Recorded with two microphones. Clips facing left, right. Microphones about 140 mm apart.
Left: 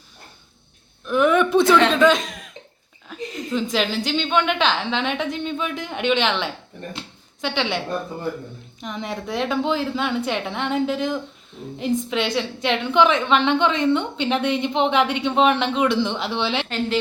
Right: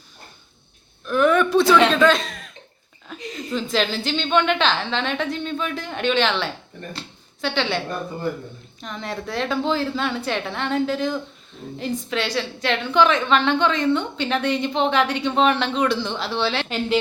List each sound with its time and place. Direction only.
1.0 s a sound: 15° left (ahead or behind)
2.0 s speech: 15° left (ahead or behind)
3.5 s a woman's voice: 15° left (ahead or behind)
8.8 s a woman's voice: 15° left (ahead or behind)
16.6 s speech: centre (ahead or behind)